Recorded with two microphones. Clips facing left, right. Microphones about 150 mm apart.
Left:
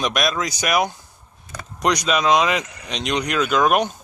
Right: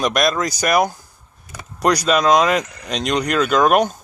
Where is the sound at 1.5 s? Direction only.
5° right (ahead or behind).